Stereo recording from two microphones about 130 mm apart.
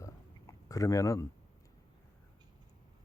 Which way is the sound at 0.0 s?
25° left (ahead or behind).